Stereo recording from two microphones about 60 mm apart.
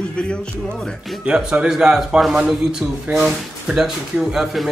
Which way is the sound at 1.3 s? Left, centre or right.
Centre.